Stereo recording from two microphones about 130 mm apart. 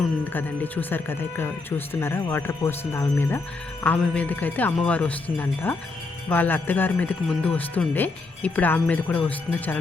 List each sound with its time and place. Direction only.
0.3 s speech: 15° left (ahead or behind)